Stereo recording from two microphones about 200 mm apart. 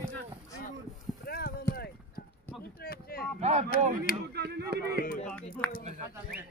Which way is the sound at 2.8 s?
50° left (ahead or behind).